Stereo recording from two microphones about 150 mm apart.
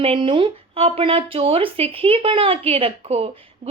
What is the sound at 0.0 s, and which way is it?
A woman's voice, 35° right (ahead or behind).